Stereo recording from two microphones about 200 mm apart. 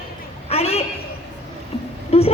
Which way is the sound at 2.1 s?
30° left (ahead or behind).